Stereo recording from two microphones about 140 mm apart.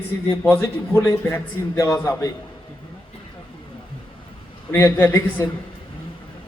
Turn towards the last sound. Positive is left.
turn(degrees=15)  # may be behind; listen again after turning